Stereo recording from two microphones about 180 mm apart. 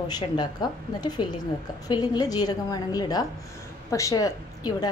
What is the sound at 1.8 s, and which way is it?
A woman's voice, 20° left (ahead or behind).